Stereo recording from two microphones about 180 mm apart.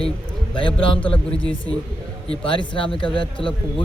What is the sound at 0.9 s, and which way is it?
Speech, 5° left (ahead or behind).